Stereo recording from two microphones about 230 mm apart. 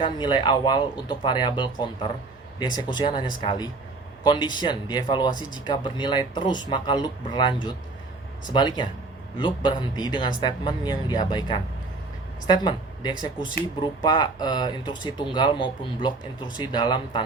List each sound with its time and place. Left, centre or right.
0.0 s speech: centre